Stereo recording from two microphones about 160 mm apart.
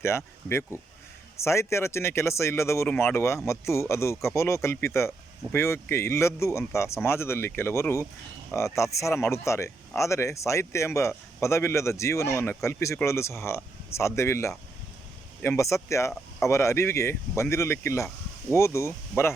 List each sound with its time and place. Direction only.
1.4 s speech: 15° left (ahead or behind)